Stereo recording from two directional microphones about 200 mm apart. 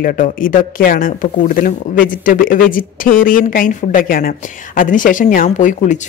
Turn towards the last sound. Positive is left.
turn(degrees=40)  # may be behind; listen again after turning